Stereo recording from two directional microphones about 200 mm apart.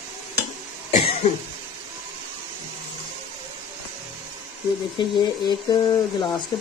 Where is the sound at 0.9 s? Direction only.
30° left (ahead or behind).